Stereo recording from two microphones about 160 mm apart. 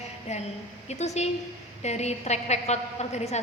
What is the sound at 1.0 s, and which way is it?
A woman's voice, 45° left (ahead or behind).